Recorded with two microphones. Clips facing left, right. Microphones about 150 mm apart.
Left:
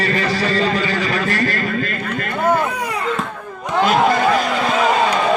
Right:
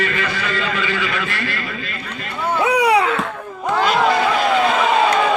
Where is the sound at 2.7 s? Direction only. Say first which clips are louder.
Right 7 dB; 75° right (ahead or behind).